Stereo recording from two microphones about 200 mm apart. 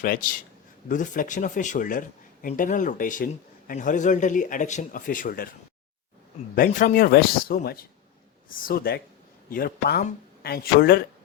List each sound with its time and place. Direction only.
0.0 s speech: 45° left (ahead or behind)
6.6 s speech: 45° left (ahead or behind)